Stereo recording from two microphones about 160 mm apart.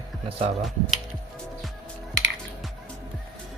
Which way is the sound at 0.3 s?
35° right (ahead or behind).